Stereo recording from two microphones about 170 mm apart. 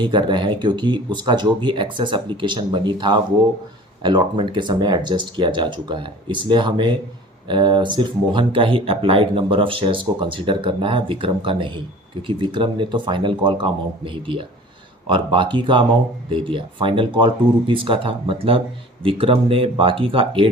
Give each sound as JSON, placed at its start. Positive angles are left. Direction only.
{"t": 0.0, "sound": "speech", "side_deg": -30}